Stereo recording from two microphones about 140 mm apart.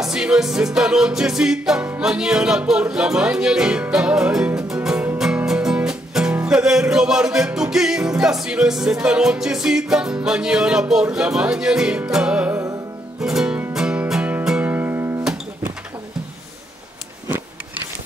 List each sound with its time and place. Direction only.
0.0 s music: 5° right (ahead or behind)